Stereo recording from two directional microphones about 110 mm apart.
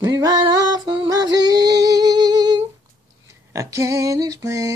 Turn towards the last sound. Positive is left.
turn(degrees=-30)  # may be behind; listen again after turning